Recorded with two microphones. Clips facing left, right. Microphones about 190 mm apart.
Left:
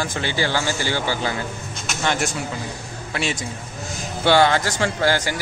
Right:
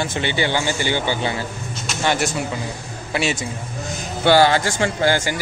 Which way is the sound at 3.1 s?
5° right (ahead or behind).